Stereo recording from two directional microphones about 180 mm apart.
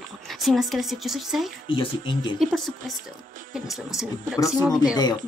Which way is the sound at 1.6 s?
30° left (ahead or behind).